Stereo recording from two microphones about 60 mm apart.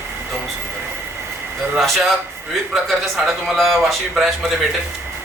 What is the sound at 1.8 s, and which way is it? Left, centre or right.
A man's voice, centre.